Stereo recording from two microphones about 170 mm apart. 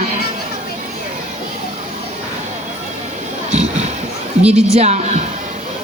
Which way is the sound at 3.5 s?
40° right (ahead or behind).